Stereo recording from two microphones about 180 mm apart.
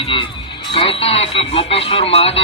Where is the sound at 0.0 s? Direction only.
30° left (ahead or behind).